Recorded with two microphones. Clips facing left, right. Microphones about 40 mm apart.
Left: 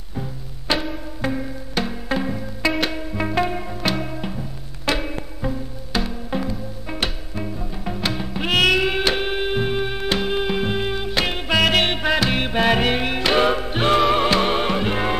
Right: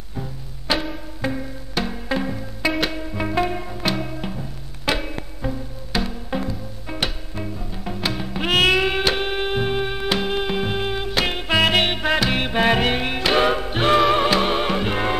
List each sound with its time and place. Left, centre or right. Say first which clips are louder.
0.1 s music: left 2 dB; centre
11.4 s music: even; centre
11.8 s music: even; centre